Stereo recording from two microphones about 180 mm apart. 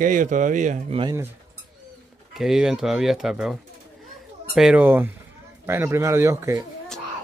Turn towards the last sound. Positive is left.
turn(degrees=-15)  # may be behind; listen again after turning